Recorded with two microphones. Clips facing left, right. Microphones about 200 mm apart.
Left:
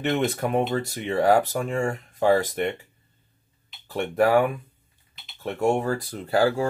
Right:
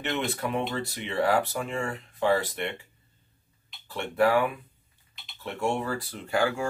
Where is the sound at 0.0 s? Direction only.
45° left (ahead or behind).